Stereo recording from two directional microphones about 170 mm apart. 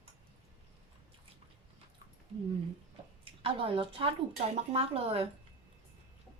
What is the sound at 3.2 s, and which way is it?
A woman's voice, 30° right (ahead or behind).